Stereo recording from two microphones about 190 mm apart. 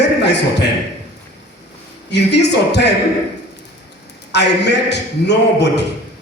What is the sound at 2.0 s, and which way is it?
Speech, 65° left (ahead or behind).